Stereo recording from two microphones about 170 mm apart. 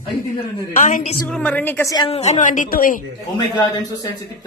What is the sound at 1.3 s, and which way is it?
Speech, 10° left (ahead or behind).